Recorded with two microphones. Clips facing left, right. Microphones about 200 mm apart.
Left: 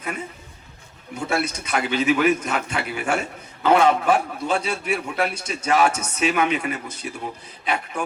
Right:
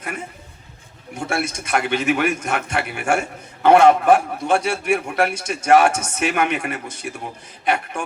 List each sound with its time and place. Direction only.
1.1 s a man's voice: 50° right (ahead or behind)